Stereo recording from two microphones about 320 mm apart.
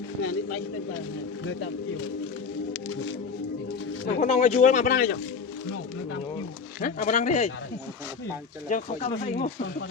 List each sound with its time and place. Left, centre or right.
2.9 s music: left
4.0 s speech: left
6.8 s speech: left
8.7 s speech: left